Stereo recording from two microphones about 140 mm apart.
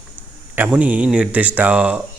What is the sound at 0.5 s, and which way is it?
A man's voice, 10° right (ahead or behind).